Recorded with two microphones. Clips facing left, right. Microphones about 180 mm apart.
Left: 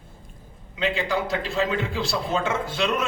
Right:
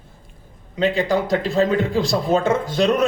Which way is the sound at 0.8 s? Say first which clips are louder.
Right 6 dB; 40° right (ahead or behind).